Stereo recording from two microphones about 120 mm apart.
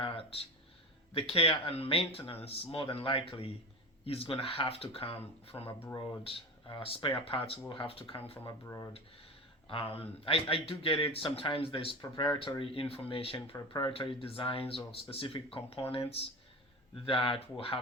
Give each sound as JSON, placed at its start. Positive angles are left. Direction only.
{"t": 0.0, "sound": "a sound", "side_deg": 55}
{"t": 1.1, "sound": "speech", "side_deg": 50}
{"t": 8.6, "sound": "speech", "side_deg": 25}
{"t": 9.6, "sound": "speech", "side_deg": 50}